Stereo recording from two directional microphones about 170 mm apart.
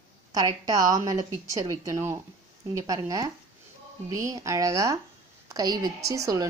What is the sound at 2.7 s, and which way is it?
A woman's voice, 20° right (ahead or behind).